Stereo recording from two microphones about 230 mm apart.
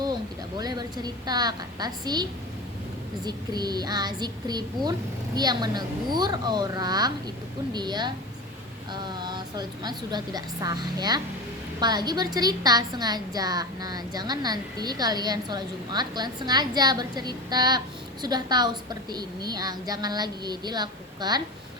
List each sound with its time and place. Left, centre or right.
0.0 s a woman's voice: centre
3.2 s a woman's voice: centre